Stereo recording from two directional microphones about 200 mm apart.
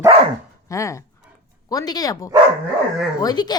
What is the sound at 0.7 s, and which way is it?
A woman's voice, 15° left (ahead or behind).